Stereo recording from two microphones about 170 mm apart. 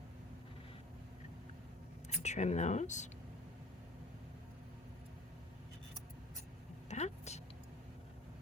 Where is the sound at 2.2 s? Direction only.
40° left (ahead or behind).